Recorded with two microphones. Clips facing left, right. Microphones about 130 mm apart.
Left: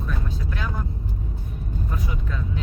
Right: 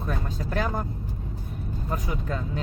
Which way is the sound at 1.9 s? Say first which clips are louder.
Right 5 dB; 40° right (ahead or behind).